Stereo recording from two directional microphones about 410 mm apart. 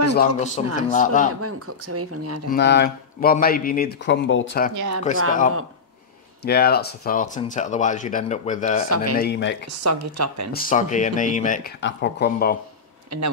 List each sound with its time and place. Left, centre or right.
0.1 s speech: left
1.4 s speech: right
2.5 s speech: left
4.7 s speech: right
6.4 s speech: left
8.8 s speech: right
9.2 s speech: left
9.8 s speech: right
10.5 s speech: centre
13.1 s speech: right